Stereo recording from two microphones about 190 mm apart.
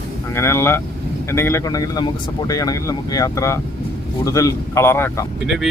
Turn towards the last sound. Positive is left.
turn(degrees=0)  # may be behind; listen again after turning